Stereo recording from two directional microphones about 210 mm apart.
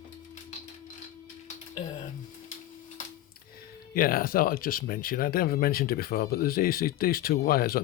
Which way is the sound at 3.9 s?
45° left (ahead or behind).